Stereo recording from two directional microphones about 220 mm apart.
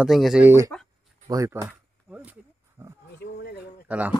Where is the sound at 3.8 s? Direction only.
5° right (ahead or behind).